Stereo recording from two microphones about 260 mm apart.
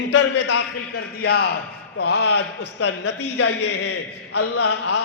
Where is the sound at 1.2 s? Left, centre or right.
Left.